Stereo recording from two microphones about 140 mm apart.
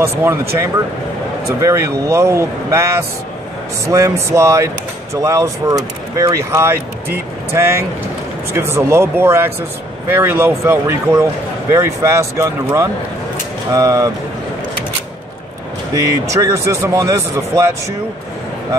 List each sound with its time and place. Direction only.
0.0 s speech: 20° right (ahead or behind)
1.6 s speech: 20° right (ahead or behind)
13.7 s speech: 20° right (ahead or behind)
15.9 s speech: 20° right (ahead or behind)